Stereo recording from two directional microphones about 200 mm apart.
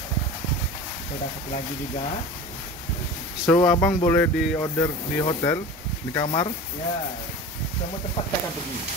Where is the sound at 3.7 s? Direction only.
10° left (ahead or behind).